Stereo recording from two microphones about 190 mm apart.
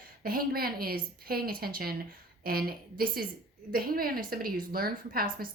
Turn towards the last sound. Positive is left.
turn(degrees=-50)  # may be behind; listen again after turning